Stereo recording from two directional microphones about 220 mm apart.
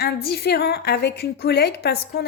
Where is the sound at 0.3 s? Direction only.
45° left (ahead or behind).